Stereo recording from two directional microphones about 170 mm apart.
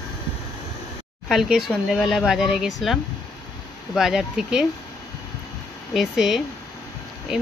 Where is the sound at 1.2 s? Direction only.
Centre (ahead or behind).